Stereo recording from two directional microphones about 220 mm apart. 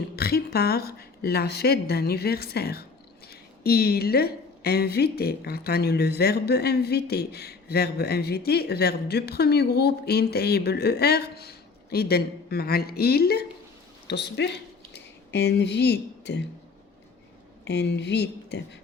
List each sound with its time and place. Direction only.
0.2 s speech: 45° left (ahead or behind)
17.7 s speech: 50° left (ahead or behind)